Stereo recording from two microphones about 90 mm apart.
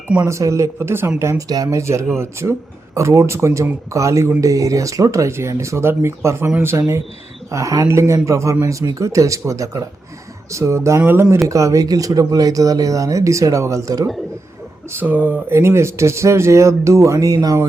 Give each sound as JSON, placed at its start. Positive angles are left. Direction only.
{"t": 0.3, "sound": "speech", "side_deg": -35}
{"t": 1.5, "sound": "speech", "side_deg": -45}
{"t": 11.4, "sound": "speech", "side_deg": -40}
{"t": 14.9, "sound": "speech", "side_deg": -20}